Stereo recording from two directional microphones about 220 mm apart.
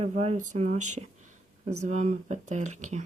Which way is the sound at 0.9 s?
35° right (ahead or behind).